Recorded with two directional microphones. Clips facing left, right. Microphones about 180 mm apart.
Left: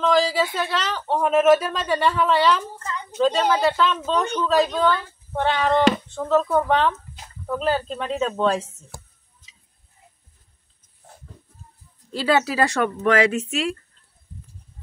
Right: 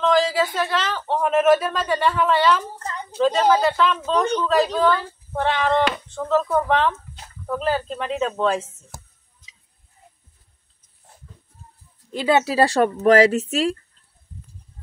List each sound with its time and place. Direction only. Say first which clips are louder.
0.0 s speech: right 1 dB; centre (ahead or behind)
2.8 s a sound: even; 35° right (ahead or behind)
3.2 s speech: right 2 dB; 5° right (ahead or behind)
12.1 s a woman's voice: right 1 dB; 20° right (ahead or behind); by 13.7 s 35° right (ahead or behind)